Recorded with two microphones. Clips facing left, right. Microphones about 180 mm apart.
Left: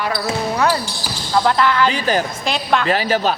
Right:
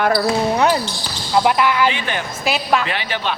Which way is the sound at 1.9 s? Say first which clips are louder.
Left 6 dB; 40° left (ahead or behind).